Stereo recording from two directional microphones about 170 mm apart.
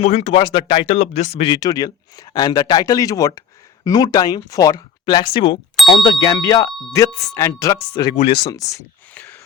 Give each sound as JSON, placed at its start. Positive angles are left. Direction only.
{"t": 0.0, "sound": "speech", "side_deg": 40}
{"t": 1.5, "sound": "speech", "side_deg": 20}